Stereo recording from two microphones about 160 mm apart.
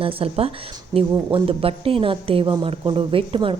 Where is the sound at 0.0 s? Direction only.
35° right (ahead or behind).